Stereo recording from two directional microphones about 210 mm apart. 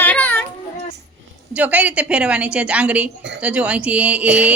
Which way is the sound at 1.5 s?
5° right (ahead or behind).